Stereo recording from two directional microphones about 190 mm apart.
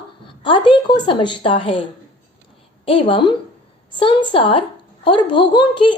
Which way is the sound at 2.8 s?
30° left (ahead or behind).